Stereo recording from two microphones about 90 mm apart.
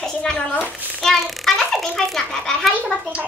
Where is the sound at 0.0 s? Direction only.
10° left (ahead or behind).